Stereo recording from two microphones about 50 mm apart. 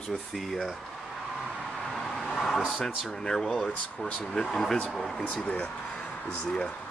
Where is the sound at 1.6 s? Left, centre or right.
Centre.